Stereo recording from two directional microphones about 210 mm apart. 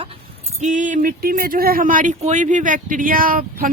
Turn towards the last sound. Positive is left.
turn(degrees=-40)  # may be behind; listen again after turning